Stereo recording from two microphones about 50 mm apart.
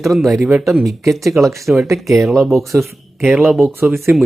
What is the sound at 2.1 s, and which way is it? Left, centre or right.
Speech, centre.